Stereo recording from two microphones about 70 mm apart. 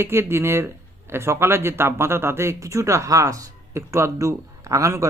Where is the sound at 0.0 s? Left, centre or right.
Right.